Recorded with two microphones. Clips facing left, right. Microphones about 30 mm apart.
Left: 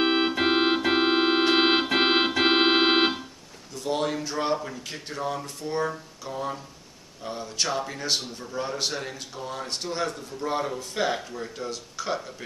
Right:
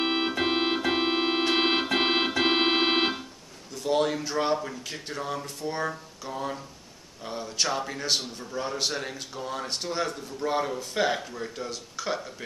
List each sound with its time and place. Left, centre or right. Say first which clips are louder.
0.0 s organ: left 3 dB; centre
3.7 s a man's voice: right 2 dB; centre